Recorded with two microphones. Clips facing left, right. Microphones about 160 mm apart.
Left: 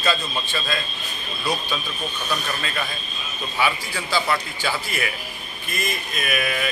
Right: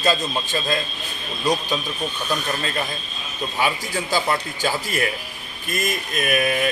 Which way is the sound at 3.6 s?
45° right (ahead or behind).